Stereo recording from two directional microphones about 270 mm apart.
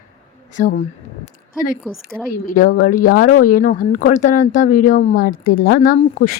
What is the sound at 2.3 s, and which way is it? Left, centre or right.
Speech, left.